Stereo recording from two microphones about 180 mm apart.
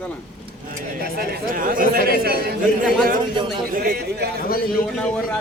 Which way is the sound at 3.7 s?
55° right (ahead or behind).